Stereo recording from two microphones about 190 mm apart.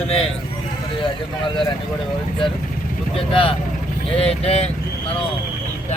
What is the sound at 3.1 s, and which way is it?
Speech, 30° left (ahead or behind).